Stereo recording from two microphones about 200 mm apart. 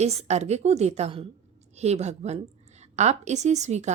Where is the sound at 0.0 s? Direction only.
30° right (ahead or behind).